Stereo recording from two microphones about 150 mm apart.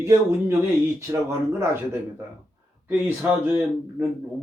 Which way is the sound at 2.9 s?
10° right (ahead or behind).